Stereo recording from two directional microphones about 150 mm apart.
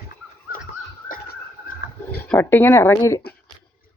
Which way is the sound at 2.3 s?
15° left (ahead or behind).